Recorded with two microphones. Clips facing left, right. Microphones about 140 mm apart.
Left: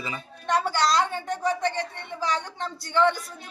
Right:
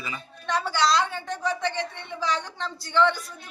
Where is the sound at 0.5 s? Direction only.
50° left (ahead or behind).